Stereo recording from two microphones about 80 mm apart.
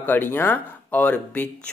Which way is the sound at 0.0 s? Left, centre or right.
Left.